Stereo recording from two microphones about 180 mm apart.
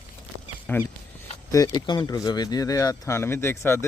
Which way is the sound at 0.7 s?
10° left (ahead or behind).